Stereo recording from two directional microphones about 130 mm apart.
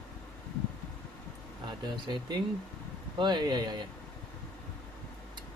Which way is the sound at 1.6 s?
35° right (ahead or behind).